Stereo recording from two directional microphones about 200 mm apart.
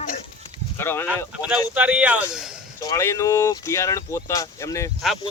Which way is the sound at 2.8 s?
15° left (ahead or behind).